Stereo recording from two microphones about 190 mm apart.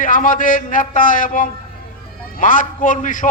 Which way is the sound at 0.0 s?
45° left (ahead or behind).